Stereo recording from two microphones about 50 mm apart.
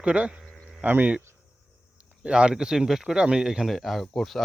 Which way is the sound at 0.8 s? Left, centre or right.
Right.